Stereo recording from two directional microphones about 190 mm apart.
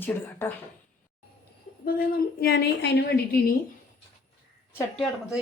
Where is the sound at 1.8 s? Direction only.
50° left (ahead or behind).